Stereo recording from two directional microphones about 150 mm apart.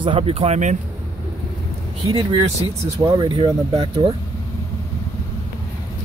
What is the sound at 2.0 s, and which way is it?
Speech, 30° right (ahead or behind).